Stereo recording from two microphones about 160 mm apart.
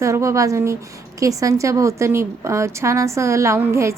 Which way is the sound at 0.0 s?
20° right (ahead or behind).